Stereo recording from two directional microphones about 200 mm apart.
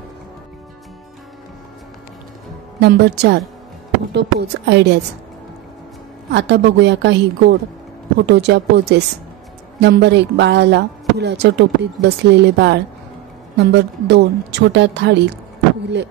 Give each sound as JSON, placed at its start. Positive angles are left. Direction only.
{"t": 2.8, "sound": "speech", "side_deg": -55}
{"t": 6.3, "sound": "speech", "side_deg": -60}